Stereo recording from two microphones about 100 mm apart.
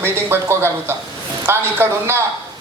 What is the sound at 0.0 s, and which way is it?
A woman's voice, 25° right (ahead or behind).